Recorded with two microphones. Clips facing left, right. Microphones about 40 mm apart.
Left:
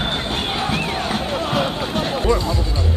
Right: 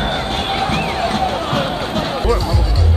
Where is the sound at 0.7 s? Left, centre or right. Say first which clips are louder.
Right 4 dB; centre.